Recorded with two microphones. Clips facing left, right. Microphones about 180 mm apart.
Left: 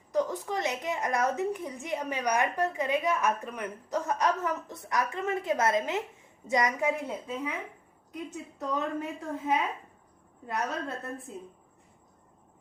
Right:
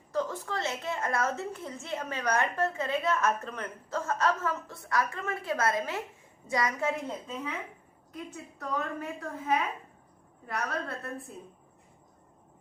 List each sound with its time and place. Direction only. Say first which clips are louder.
0.1 s a woman's voice: left 3 dB; 15° left (ahead or behind)
8.1 s a woman's voice: left 3 dB; 20° left (ahead or behind)
10.4 s a woman's voice: left 1 dB; 20° left (ahead or behind)